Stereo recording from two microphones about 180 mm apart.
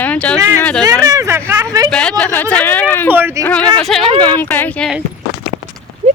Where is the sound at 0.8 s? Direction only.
20° right (ahead or behind).